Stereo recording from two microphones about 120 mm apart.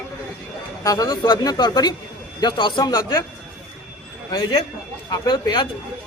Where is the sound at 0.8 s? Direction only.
30° left (ahead or behind).